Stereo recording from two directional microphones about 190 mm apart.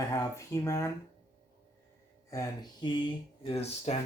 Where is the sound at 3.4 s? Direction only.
35° left (ahead or behind).